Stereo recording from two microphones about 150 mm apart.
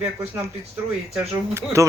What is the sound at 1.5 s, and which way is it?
Speech, 20° right (ahead or behind).